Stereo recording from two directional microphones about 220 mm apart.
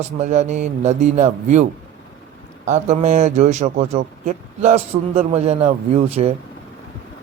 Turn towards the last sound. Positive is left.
turn(degrees=-30)  # may be behind; listen again after turning